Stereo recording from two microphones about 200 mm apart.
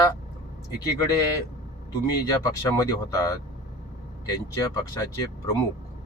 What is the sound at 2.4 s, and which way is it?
Speech, 15° left (ahead or behind).